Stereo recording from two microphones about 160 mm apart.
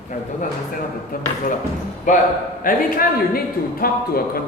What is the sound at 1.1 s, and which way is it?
Speech, 65° left (ahead or behind).